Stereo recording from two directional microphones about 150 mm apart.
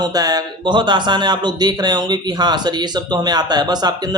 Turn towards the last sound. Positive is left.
turn(degrees=-25)  # may be behind; listen again after turning